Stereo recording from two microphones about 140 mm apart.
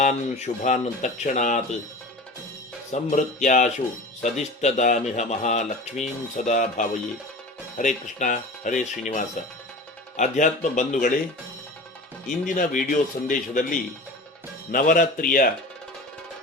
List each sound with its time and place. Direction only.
0.0 s speech: 55° left (ahead or behind)
2.9 s speech: 60° left (ahead or behind)
12.5 s a man's voice: 75° left (ahead or behind)